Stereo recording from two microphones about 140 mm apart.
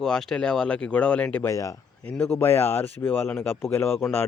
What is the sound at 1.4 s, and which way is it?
Speech, 25° left (ahead or behind).